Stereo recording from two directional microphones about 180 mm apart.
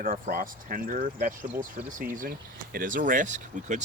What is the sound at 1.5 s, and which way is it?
Speech, 10° right (ahead or behind).